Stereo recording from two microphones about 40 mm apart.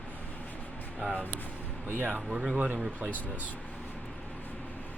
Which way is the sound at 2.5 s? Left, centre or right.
Right.